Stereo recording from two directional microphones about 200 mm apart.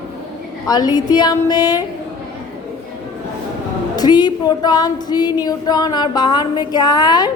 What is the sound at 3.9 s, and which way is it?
A woman's voice, 20° left (ahead or behind).